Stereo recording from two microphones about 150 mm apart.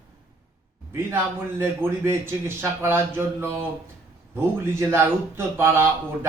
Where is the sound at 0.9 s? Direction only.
15° right (ahead or behind).